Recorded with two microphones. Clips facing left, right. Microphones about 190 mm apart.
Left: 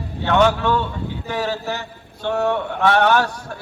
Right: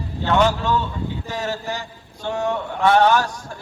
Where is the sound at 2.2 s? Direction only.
65° left (ahead or behind).